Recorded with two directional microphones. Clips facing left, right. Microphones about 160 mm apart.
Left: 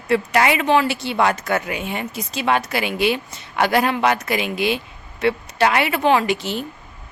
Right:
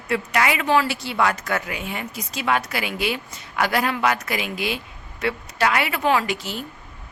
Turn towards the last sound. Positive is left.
turn(degrees=25)  # may be behind; listen again after turning